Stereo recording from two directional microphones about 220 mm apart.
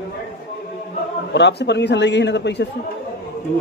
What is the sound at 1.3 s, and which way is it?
Speech, 50° left (ahead or behind).